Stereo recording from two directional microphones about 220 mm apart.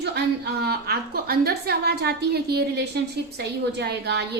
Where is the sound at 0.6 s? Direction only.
45° right (ahead or behind).